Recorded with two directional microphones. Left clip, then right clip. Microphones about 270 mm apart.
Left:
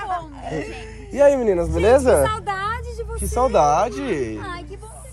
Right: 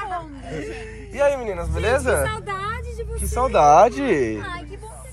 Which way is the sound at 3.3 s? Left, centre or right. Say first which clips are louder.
Right 3 dB; centre.